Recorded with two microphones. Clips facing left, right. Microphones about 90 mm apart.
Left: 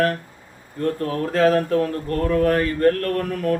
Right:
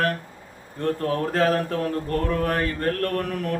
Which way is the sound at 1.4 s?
40° left (ahead or behind).